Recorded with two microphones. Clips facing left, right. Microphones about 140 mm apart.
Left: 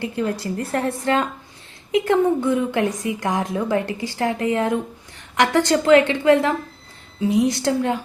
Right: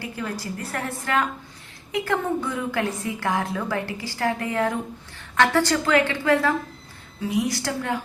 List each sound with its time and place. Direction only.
0.0 s a woman's voice: 25° left (ahead or behind)